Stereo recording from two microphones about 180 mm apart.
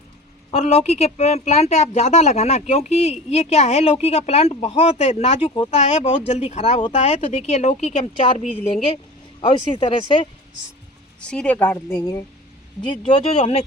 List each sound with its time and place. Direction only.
0.5 s speech: 35° left (ahead or behind)
11.2 s a woman's voice: 5° left (ahead or behind)
13.1 s speech: 30° left (ahead or behind)